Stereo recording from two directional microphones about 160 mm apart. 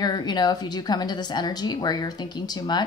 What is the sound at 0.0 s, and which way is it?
Speech, 25° left (ahead or behind).